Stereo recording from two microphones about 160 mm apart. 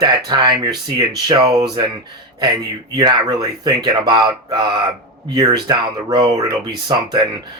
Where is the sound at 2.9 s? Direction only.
25° right (ahead or behind).